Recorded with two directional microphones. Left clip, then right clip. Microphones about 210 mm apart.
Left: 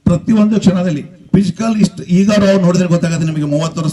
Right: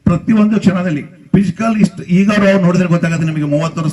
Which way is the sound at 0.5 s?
90° left.